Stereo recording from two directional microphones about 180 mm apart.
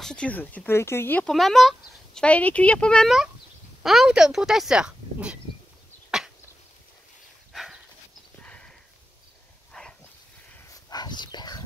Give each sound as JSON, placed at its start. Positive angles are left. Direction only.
{"t": 0.0, "sound": "speech", "side_deg": 5}
{"t": 1.3, "sound": "speech", "side_deg": 0}
{"t": 6.0, "sound": "a sound", "side_deg": -5}
{"t": 7.5, "sound": "dog", "side_deg": 0}
{"t": 8.4, "sound": "clip-clop", "side_deg": 5}
{"t": 9.7, "sound": "dog", "side_deg": 5}
{"t": 10.7, "sound": "dog", "side_deg": 20}